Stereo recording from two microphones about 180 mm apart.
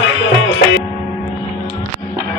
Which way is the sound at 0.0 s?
90° left.